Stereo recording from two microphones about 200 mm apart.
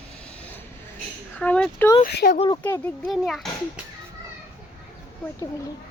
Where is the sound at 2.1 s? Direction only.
55° left (ahead or behind).